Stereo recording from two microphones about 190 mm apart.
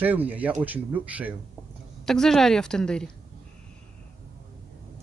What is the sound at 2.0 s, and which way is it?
A woman's voice, centre (ahead or behind).